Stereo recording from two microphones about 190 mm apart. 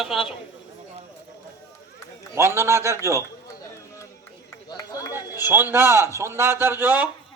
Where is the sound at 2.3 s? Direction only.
15° right (ahead or behind).